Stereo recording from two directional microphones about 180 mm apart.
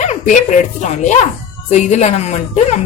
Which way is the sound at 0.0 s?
40° left (ahead or behind).